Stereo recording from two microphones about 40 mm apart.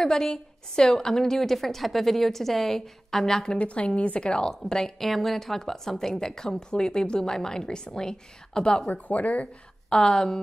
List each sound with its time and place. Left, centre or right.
0.0 s a woman's voice: centre
3.5 s a woman's voice: left
8.9 s speech: left
9.8 s a woman's voice: centre